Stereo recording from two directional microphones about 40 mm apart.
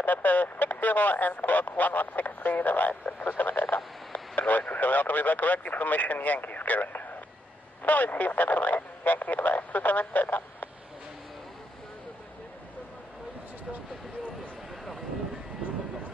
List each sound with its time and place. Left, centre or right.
0.0 s speech: left
2.9 s speech: left